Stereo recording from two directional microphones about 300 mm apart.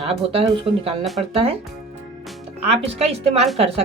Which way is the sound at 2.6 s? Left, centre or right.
Centre.